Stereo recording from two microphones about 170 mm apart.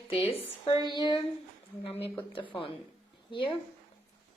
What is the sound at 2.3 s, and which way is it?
A woman's voice, 30° left (ahead or behind).